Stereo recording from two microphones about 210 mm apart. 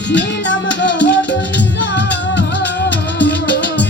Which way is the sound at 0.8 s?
55° left (ahead or behind).